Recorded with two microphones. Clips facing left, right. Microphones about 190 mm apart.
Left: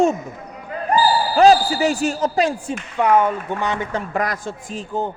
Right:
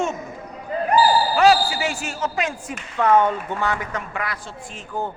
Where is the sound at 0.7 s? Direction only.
30° right (ahead or behind).